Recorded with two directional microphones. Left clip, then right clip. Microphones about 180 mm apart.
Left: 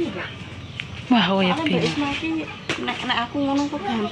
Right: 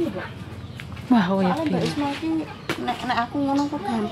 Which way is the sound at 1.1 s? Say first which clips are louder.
Left 2 dB; 10° right (ahead or behind).